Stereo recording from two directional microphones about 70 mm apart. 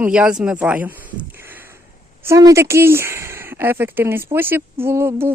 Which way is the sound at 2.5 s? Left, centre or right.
Right.